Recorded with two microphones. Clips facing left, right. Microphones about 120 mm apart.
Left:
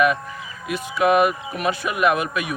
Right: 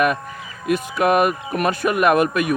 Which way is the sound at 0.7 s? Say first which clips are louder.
Right 1 dB; 50° right (ahead or behind).